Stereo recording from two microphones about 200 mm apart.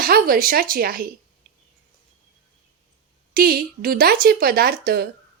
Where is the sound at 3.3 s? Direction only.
50° right (ahead or behind).